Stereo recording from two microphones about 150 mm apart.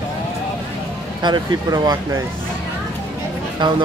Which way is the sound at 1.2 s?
30° right (ahead or behind).